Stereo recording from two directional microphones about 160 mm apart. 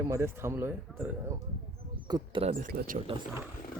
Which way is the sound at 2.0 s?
25° right (ahead or behind).